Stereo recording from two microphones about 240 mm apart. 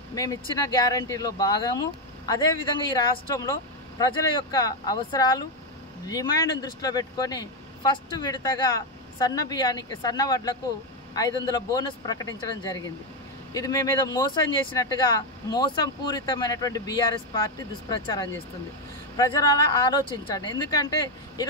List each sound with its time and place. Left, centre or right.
0.1 s speech: centre
4.0 s speech: centre
11.7 s speech: centre